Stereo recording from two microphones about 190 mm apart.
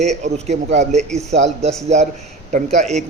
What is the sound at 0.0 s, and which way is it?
A man's voice, 35° right (ahead or behind).